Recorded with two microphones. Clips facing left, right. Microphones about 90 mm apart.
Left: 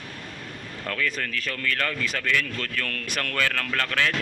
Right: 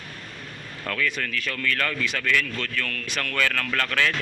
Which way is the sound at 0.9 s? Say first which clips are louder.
Right 1 dB; 35° left (ahead or behind).